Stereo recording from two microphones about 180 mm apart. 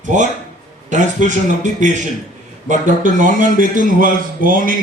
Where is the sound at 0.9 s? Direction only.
45° right (ahead or behind).